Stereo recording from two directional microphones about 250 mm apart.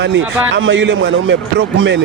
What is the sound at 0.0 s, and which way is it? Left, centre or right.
A man's voice, right.